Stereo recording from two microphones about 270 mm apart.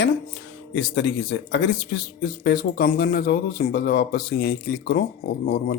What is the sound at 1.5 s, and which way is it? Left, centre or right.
Speech, left.